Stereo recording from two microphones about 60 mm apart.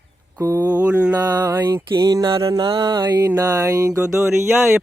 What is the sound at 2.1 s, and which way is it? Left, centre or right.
Mantra, right.